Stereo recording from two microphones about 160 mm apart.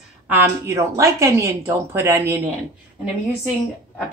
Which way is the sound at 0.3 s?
15° right (ahead or behind).